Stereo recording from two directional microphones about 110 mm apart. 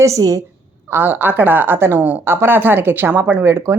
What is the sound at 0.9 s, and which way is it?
A woman's voice, 20° right (ahead or behind).